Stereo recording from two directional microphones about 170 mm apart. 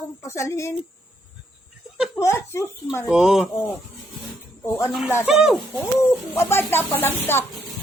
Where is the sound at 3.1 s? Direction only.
5° right (ahead or behind).